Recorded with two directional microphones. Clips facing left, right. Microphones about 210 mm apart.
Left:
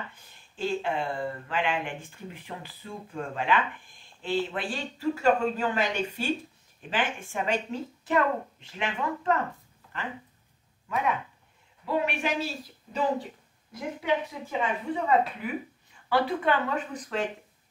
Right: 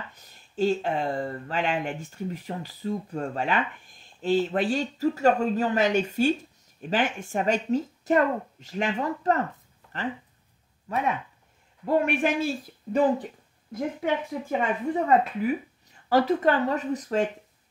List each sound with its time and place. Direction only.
0.1 s speech: 40° right (ahead or behind)
10.9 s a woman's voice: 40° right (ahead or behind)